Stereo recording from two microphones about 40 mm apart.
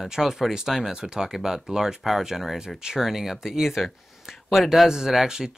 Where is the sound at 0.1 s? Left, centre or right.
Centre.